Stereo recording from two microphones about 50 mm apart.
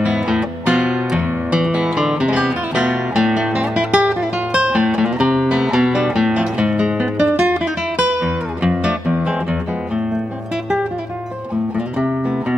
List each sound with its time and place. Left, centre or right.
0.0 s music: centre
8.6 s music: centre